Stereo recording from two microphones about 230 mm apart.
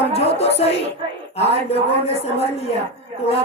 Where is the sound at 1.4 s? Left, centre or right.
Left.